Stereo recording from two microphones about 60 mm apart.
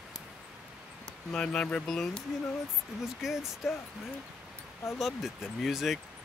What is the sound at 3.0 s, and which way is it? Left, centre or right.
Speech, centre.